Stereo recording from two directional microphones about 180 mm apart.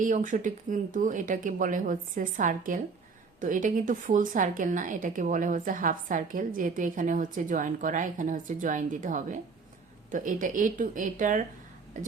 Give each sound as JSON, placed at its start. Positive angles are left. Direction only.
{"t": 0.0, "sound": "speech", "side_deg": -45}